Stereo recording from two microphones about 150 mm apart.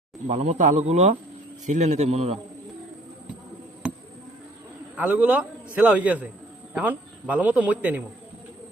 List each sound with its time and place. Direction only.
0.3 s a man's voice: 55° right (ahead or behind)
4.9 s a man's voice: 10° right (ahead or behind)